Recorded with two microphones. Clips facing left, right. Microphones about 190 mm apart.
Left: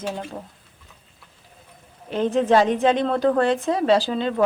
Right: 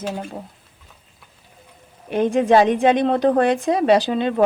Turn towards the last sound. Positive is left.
turn(degrees=-15)  # may be behind; listen again after turning